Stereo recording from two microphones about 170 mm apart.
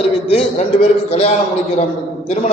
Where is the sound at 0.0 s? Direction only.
35° left (ahead or behind).